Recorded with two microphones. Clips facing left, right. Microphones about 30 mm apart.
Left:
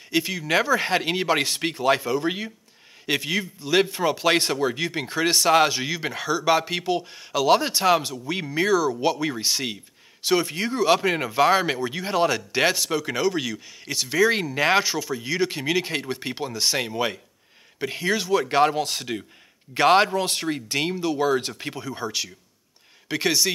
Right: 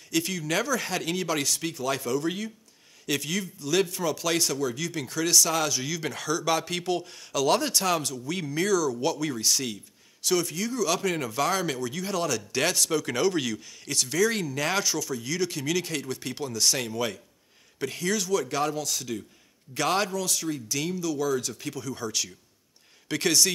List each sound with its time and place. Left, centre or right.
0.1 s speech: left